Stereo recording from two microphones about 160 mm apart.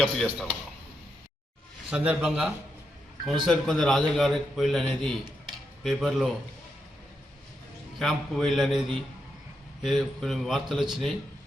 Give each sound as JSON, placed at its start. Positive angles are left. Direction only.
{"t": 0.3, "sound": "a man's voice", "side_deg": -10}
{"t": 1.9, "sound": "a man's voice", "side_deg": -5}
{"t": 7.9, "sound": "a man's voice", "side_deg": 0}